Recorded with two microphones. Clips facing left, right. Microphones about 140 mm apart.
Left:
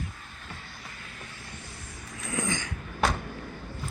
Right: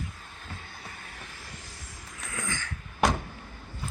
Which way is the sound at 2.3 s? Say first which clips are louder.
Left 6 dB; 20° left (ahead or behind).